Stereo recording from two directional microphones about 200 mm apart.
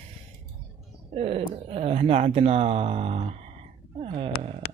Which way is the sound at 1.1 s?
30° right (ahead or behind).